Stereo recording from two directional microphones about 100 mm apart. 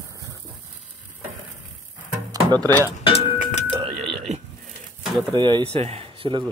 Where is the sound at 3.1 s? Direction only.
70° left (ahead or behind).